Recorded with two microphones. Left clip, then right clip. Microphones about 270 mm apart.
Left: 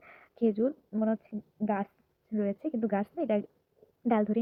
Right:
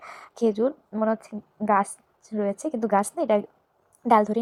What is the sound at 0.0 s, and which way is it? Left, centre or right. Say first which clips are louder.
A woman's voice: right 6 dB; centre.